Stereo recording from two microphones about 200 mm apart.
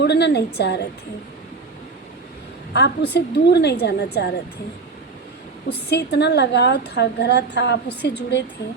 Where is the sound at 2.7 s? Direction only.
55° left (ahead or behind).